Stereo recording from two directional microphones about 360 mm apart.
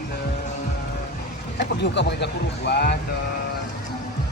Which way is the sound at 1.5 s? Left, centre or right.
Left.